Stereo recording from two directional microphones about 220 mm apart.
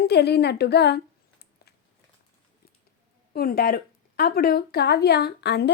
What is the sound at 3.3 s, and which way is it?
A woman's voice, 45° left (ahead or behind).